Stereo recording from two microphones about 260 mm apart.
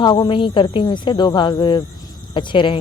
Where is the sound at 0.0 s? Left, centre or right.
Centre.